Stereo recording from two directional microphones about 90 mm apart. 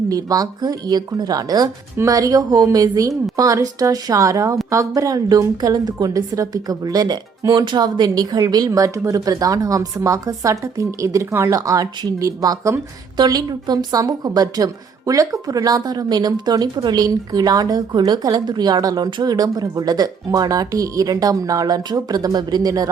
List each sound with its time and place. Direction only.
0.1 s a woman's voice: 40° right (ahead or behind)